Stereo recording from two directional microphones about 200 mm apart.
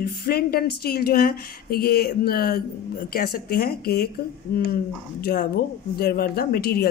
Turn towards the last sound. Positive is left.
turn(degrees=50)  # may be behind; listen again after turning